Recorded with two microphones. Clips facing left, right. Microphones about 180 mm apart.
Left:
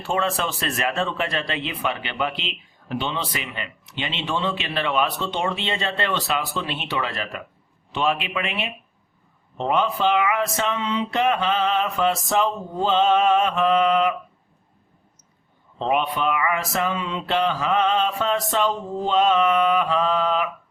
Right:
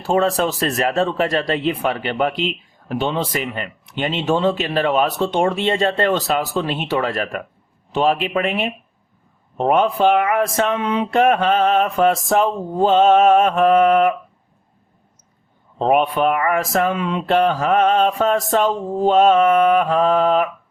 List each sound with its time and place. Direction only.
0.0 s speech: 40° right (ahead or behind)
15.8 s speech: 50° right (ahead or behind)